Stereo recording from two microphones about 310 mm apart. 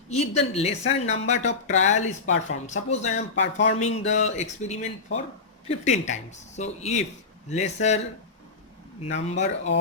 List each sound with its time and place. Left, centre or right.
0.1 s speech: left
9.3 s speech: left